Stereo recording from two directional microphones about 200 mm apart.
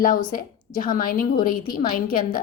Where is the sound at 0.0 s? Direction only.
40° left (ahead or behind).